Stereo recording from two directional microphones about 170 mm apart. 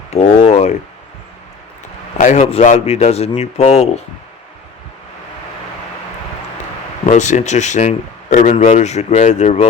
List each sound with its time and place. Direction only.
0.1 s a sound: 40° left (ahead or behind)
2.1 s a man's voice: 45° left (ahead or behind)
7.0 s speech: 45° left (ahead or behind)